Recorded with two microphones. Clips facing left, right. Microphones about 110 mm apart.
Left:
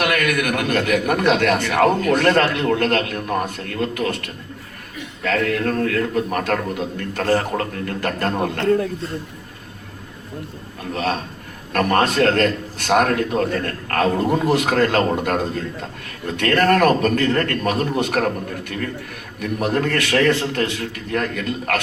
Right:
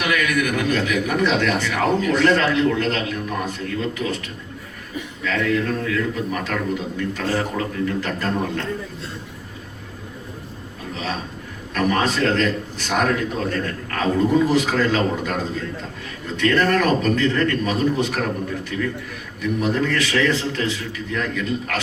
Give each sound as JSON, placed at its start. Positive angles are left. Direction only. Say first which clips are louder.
{"t": 0.0, "sound": "speech", "louder": "left 1 dB", "side_deg": 55}
{"t": 10.9, "sound": "speech", "louder": "left 5 dB", "side_deg": 55}